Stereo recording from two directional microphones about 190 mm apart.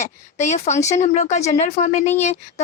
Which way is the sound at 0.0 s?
35° left (ahead or behind).